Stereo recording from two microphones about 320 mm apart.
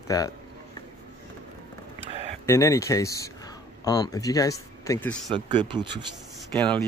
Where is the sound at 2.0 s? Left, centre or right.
Centre.